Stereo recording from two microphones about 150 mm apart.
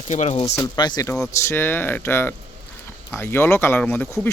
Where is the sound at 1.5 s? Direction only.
15° left (ahead or behind).